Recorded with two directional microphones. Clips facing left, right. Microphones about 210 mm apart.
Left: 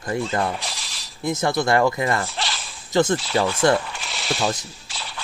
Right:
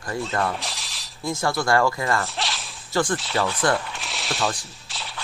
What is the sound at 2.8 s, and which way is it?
Speech, 20° left (ahead or behind).